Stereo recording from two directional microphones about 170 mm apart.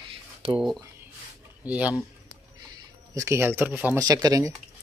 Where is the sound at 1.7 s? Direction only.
10° right (ahead or behind).